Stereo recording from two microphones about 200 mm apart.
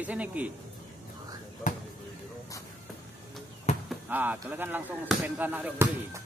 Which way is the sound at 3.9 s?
10° right (ahead or behind).